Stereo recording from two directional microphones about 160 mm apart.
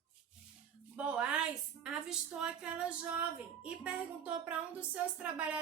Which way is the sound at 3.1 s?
5° right (ahead or behind).